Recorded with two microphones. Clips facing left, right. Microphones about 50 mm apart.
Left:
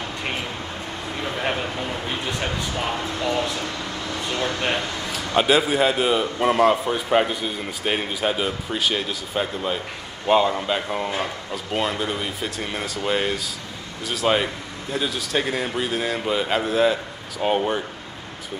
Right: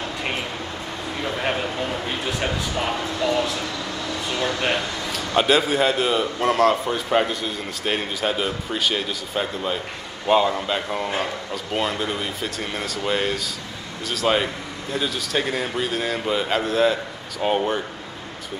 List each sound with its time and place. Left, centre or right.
1.3 s a sound: centre
2.9 s speech: left
5.0 s a man's voice: centre